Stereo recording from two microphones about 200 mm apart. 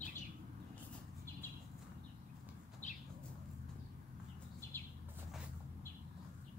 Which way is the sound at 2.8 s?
35° left (ahead or behind).